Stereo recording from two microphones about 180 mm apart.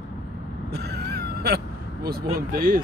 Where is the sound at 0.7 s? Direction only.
60° right (ahead or behind).